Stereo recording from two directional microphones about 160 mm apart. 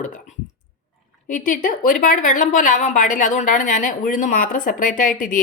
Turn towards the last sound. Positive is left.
turn(degrees=60)  # may be behind; listen again after turning